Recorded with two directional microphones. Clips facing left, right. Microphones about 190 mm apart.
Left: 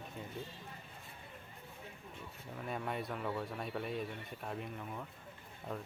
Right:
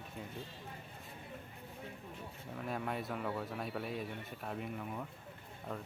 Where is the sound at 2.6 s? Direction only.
Centre (ahead or behind).